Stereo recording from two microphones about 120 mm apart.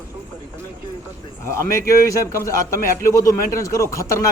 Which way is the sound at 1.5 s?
25° left (ahead or behind).